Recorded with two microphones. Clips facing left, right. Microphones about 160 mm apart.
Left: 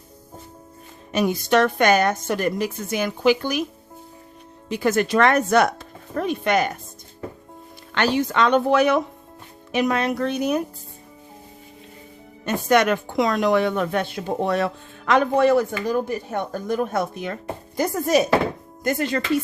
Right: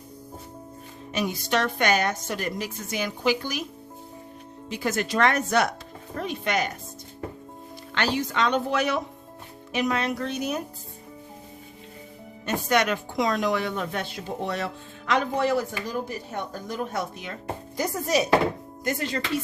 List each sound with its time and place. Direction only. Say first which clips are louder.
1.1 s a woman's voice: left 7 dB; 50° left (ahead or behind)
4.7 s a woman's voice: left 7 dB; 55° left (ahead or behind)
7.9 s speech: left 5 dB; 55° left (ahead or behind)
12.6 s a woman's voice: left 6 dB; 50° left (ahead or behind)